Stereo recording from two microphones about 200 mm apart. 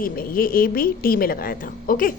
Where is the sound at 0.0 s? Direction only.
45° left (ahead or behind).